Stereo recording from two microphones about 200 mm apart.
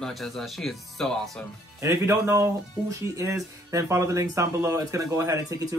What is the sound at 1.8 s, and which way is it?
Speech, 15° right (ahead or behind).